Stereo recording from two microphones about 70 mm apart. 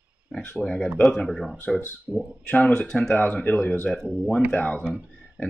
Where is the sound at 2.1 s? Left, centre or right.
Centre.